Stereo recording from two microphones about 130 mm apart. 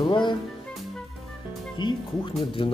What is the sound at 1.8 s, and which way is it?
Speech, 35° left (ahead or behind).